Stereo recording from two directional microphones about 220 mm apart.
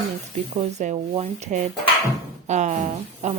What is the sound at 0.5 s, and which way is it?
A woman's voice, 30° right (ahead or behind).